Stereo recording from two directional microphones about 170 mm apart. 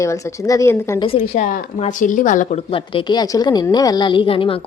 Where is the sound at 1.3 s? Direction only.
45° left (ahead or behind).